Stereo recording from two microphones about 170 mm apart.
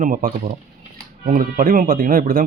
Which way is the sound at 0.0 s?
55° right (ahead or behind).